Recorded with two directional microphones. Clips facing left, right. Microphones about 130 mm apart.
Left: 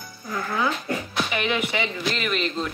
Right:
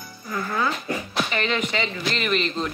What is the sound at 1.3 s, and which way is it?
Speech, 15° left (ahead or behind).